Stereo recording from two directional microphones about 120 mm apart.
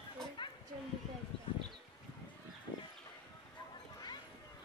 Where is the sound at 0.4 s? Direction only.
40° left (ahead or behind).